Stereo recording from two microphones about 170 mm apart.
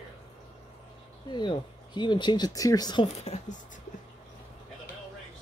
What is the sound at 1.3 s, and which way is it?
Speech, 25° left (ahead or behind).